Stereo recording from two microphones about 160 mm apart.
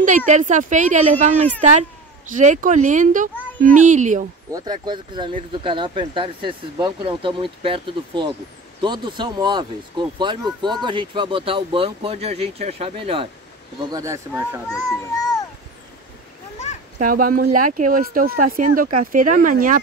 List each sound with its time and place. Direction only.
0.3 s speech: 50° right (ahead or behind)
4.5 s speech: 25° right (ahead or behind)
13.9 s a child's voice: 20° right (ahead or behind)
14.9 s a child's voice: 20° left (ahead or behind)
17.0 s speech: 60° right (ahead or behind)